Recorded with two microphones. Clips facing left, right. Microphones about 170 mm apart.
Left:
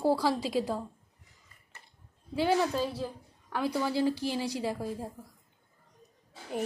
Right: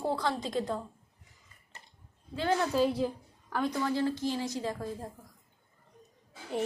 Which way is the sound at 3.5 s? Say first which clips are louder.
Even; 10° left (ahead or behind).